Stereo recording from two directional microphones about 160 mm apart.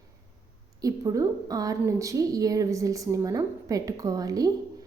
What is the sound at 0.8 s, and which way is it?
A woman's voice, 20° right (ahead or behind).